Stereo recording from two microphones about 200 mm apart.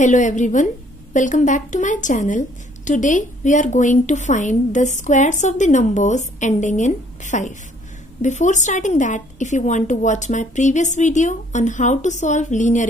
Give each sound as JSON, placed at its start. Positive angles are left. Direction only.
{"t": 0.0, "sound": "a woman's voice", "side_deg": 40}